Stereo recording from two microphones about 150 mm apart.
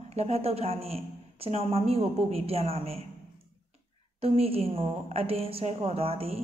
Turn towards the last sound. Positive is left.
turn(degrees=-40)  # may be behind; listen again after turning